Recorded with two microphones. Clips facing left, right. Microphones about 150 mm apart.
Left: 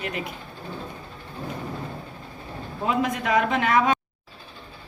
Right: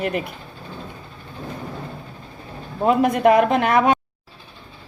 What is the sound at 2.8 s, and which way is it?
A man's voice, 55° right (ahead or behind).